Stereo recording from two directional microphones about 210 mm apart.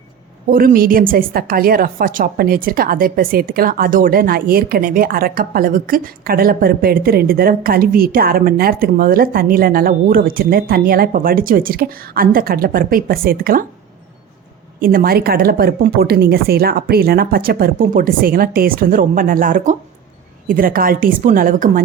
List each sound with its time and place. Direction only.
0.5 s a woman's voice: 45° right (ahead or behind)
14.8 s a woman's voice: 40° right (ahead or behind)